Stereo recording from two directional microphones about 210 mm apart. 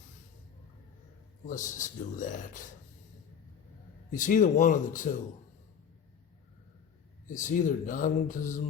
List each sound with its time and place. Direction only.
1.5 s speech: 35° left (ahead or behind)
4.1 s speech: 35° left (ahead or behind)
7.3 s speech: 35° left (ahead or behind)